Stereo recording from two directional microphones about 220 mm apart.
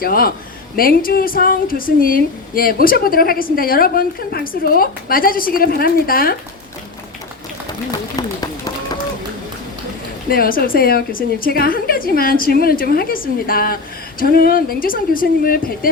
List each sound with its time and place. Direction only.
0.0 s a woman's voice: 45° left (ahead or behind)
7.9 s run: 15° left (ahead or behind)
10.2 s a woman's voice: 40° left (ahead or behind)